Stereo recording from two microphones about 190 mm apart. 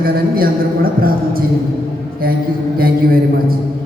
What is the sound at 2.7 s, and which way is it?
Speech, 50° right (ahead or behind).